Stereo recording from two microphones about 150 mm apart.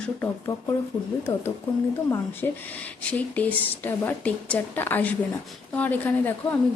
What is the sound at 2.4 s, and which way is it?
A woman's voice, 15° left (ahead or behind).